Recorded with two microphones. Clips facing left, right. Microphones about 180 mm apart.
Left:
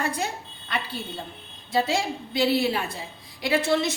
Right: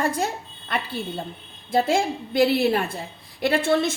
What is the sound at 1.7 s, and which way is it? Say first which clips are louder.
A woman's voice: right 4 dB; 50° right (ahead or behind).